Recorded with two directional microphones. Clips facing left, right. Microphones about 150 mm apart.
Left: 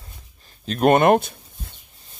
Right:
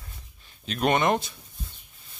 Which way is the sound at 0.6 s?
45° left (ahead or behind).